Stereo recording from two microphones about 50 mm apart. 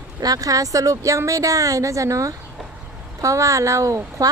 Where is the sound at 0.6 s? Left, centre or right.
Right.